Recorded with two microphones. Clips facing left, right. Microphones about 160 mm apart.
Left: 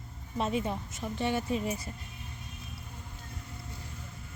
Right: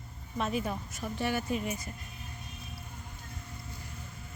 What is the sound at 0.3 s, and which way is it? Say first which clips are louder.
A woman's voice: left 1 dB; 25° left (ahead or behind).